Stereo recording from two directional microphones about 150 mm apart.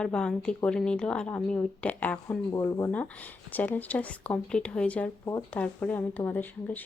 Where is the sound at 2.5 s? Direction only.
20° left (ahead or behind).